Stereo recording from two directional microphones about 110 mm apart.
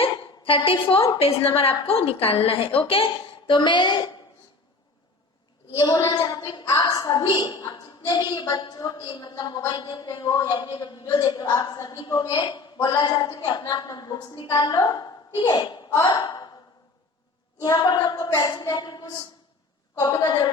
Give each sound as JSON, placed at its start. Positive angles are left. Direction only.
{"t": 0.0, "sound": "a sound", "side_deg": 55}
{"t": 1.2, "sound": "a woman's voice", "side_deg": 60}
{"t": 6.0, "sound": "a woman's voice", "side_deg": 30}
{"t": 17.6, "sound": "a woman's voice", "side_deg": 35}